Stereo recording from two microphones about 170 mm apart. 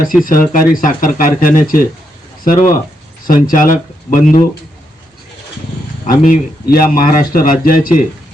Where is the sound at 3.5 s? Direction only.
55° left (ahead or behind).